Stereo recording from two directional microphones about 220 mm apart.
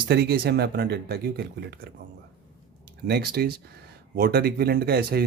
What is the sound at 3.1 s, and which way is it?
Speech, 45° right (ahead or behind).